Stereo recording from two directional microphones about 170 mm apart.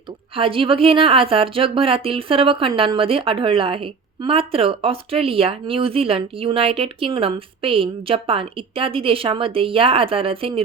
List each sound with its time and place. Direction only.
0.3 s a woman's voice: 30° right (ahead or behind)